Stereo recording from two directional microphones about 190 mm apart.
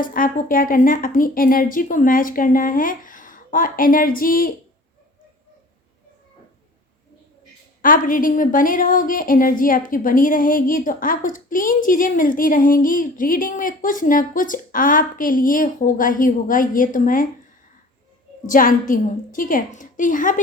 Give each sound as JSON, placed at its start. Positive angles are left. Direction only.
{"t": 0.0, "sound": "a woman's voice", "side_deg": 45}
{"t": 7.8, "sound": "a woman's voice", "side_deg": 45}
{"t": 18.4, "sound": "a woman's voice", "side_deg": 45}